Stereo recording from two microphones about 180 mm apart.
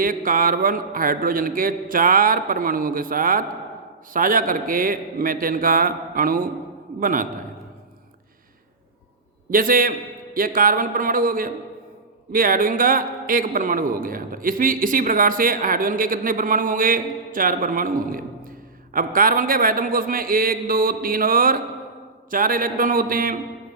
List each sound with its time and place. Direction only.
0.0 s a man's voice: 50° right (ahead or behind)
9.5 s a man's voice: 50° right (ahead or behind)